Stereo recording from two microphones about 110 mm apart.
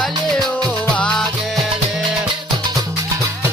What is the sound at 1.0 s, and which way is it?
Music, 10° left (ahead or behind).